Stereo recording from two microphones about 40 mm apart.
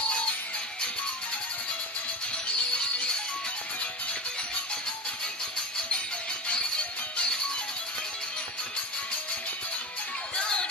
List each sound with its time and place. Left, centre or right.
2.3 s music: left
5.9 s music: left
10.3 s music: left